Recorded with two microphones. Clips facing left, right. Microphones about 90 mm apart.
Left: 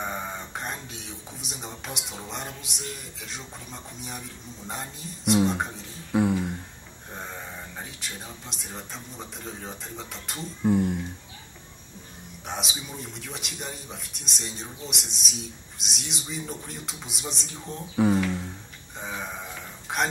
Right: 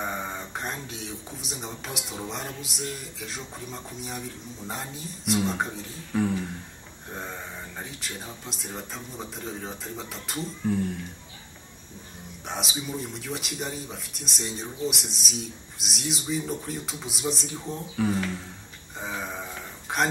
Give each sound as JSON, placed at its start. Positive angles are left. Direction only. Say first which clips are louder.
{"t": 0.0, "sound": "speech", "louder": "right 1 dB", "side_deg": 0}
{"t": 6.1, "sound": "a sound", "louder": "left 3 dB", "side_deg": 10}
{"t": 7.1, "sound": "speech", "louder": "right 1 dB", "side_deg": 0}
{"t": 10.6, "sound": "speech", "louder": "left 5 dB", "side_deg": 20}
{"t": 12.4, "sound": "speech", "louder": "right 2 dB", "side_deg": 0}
{"t": 18.9, "sound": "a sound", "louder": "right 1 dB", "side_deg": 0}